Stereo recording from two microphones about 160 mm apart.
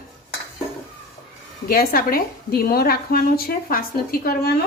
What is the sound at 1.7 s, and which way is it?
A woman's voice, 65° left (ahead or behind).